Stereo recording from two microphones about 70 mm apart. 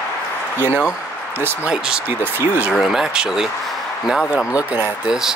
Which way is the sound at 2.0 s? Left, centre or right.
Right.